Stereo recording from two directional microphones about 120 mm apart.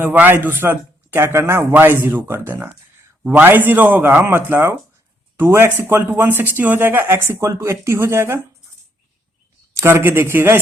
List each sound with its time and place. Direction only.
0.0 s speech: 15° right (ahead or behind)
9.8 s speech: 15° right (ahead or behind)